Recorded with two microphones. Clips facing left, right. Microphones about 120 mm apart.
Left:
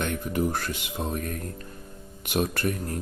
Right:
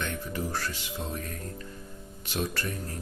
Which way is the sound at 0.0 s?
50° left (ahead or behind).